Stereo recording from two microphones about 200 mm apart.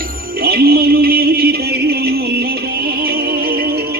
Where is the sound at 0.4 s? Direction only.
50° right (ahead or behind).